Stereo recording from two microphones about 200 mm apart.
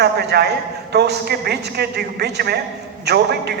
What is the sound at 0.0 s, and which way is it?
A man's voice, 55° right (ahead or behind).